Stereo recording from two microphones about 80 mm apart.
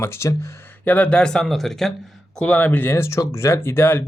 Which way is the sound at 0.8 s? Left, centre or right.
Centre.